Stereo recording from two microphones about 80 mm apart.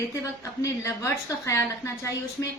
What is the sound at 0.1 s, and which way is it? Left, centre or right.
A woman's voice, left.